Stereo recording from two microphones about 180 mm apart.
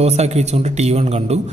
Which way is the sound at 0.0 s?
35° right (ahead or behind).